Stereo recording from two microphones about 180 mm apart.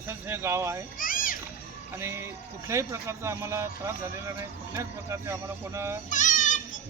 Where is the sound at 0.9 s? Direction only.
50° left (ahead or behind).